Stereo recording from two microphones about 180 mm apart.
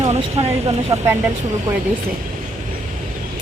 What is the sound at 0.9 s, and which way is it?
Speech, 20° right (ahead or behind).